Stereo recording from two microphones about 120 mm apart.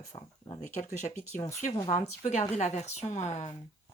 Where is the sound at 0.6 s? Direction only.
90° left.